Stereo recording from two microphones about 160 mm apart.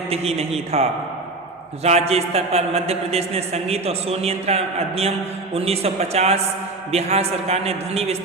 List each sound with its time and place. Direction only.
0.1 s a man's voice: 40° right (ahead or behind)